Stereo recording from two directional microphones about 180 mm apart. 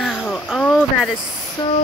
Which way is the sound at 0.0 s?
Centre (ahead or behind).